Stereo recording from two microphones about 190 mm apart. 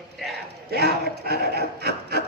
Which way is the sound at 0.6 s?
55° right (ahead or behind).